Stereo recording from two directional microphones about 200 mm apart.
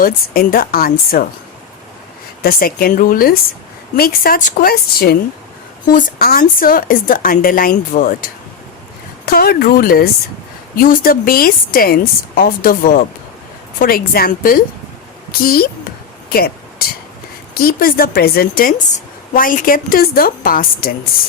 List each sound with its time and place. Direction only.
0.0 s a woman's voice: 45° left (ahead or behind)
2.4 s a woman's voice: 50° left (ahead or behind)
16.3 s a sound: 50° left (ahead or behind)
17.5 s a woman's voice: 50° left (ahead or behind)